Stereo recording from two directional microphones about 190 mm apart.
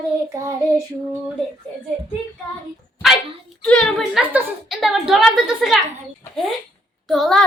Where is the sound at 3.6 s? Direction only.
5° left (ahead or behind).